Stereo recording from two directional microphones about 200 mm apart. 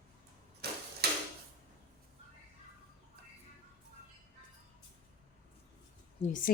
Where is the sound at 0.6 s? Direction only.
55° right (ahead or behind).